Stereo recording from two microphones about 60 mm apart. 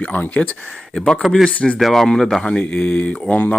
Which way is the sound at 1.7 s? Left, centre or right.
Centre.